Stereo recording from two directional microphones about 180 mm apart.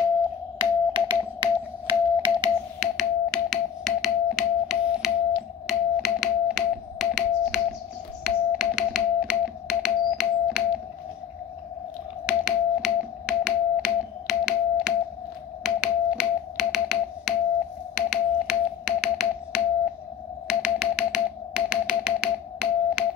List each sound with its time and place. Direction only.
0.6 s music: 25° right (ahead or behind)
2.8 s music: centre (ahead or behind)
8.2 s finger snapping: centre (ahead or behind)
12.3 s finger snapping: 5° right (ahead or behind)